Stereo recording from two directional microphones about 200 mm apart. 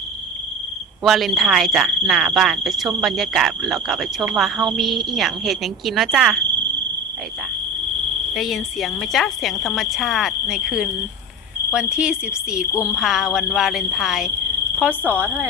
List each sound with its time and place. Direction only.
1.0 s speech: centre (ahead or behind)
8.3 s speech: centre (ahead or behind)
12.7 s speech: 15° left (ahead or behind)
13.0 s speech: centre (ahead or behind)